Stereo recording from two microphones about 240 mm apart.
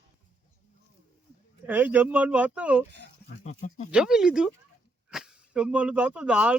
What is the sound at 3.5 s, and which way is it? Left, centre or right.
Speech, left.